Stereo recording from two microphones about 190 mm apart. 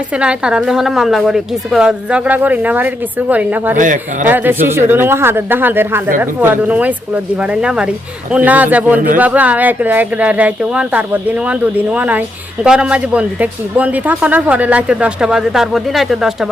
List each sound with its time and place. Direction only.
0.1 s a woman's voice: 5° right (ahead or behind)
3.8 s a man's voice: 45° right (ahead or behind)
4.3 s a woman's voice: 10° right (ahead or behind)